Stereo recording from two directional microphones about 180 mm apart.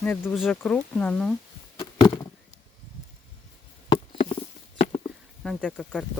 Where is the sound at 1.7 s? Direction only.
25° left (ahead or behind).